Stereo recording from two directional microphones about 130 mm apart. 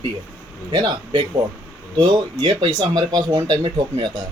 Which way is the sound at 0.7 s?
35° right (ahead or behind).